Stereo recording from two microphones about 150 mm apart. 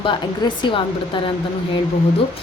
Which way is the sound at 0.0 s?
30° left (ahead or behind).